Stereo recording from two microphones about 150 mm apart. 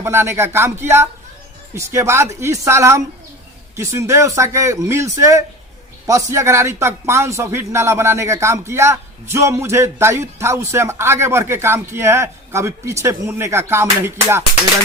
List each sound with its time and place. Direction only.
0.0 s speech: 15° right (ahead or behind)